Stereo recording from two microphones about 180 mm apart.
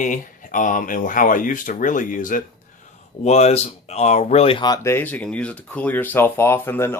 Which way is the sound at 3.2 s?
40° left (ahead or behind).